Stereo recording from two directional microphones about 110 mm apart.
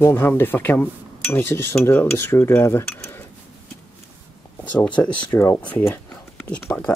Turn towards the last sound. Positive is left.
turn(degrees=20)  # may be behind; listen again after turning